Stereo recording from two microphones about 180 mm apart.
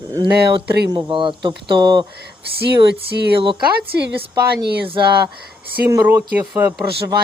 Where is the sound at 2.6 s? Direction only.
65° right (ahead or behind).